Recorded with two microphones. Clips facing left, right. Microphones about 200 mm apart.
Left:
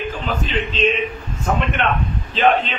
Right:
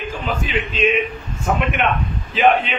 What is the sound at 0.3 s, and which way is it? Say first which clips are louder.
A man's voice: right 1 dB; 10° right (ahead or behind).